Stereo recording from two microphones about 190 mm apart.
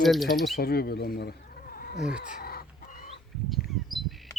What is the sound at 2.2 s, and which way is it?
Chicken, 50° left (ahead or behind).